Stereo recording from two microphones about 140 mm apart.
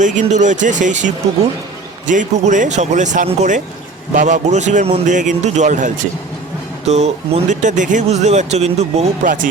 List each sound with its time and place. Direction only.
0.0 s a man's voice: 60° right (ahead or behind)
6.8 s speech: 50° right (ahead or behind)
9.2 s speech: 75° right (ahead or behind)